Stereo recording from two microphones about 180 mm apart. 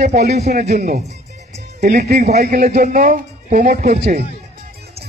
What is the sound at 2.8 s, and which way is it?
Speech, 45° right (ahead or behind).